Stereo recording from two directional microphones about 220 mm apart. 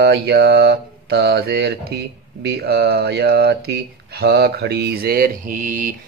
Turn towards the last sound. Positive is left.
turn(degrees=-35)  # may be behind; listen again after turning